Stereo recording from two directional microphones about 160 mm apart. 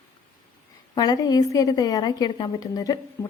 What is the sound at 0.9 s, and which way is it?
A woman's voice, 25° left (ahead or behind).